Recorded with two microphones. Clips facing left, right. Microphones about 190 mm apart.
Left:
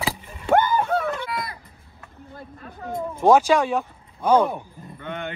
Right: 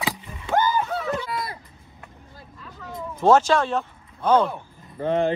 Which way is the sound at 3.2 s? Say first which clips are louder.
Left 1 dB; 15° left (ahead or behind).